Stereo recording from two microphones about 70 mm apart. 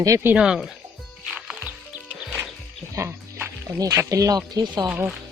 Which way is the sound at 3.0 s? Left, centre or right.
Right.